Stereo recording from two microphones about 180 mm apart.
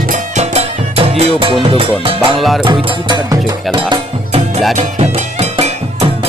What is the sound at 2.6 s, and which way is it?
Speech, 20° right (ahead or behind).